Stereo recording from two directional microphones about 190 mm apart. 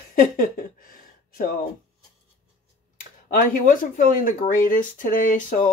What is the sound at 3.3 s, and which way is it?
Speech, 45° left (ahead or behind).